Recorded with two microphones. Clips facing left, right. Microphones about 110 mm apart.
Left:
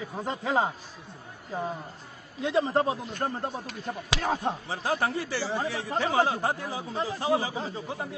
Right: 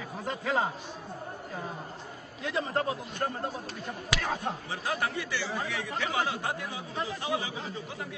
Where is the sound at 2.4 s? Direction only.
30° left (ahead or behind).